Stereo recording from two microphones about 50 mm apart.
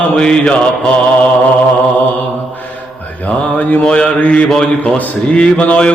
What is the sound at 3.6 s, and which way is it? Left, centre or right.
Mantra, left.